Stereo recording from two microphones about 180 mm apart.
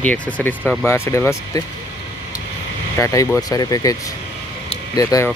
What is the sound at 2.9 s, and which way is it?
Speech, 15° left (ahead or behind).